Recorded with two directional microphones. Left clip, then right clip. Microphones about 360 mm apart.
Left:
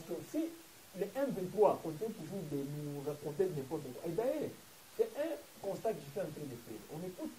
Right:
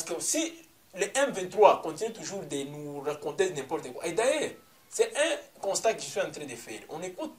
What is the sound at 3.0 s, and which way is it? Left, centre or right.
Speech, centre.